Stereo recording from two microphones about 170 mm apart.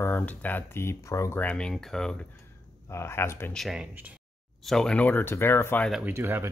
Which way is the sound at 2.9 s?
15° left (ahead or behind).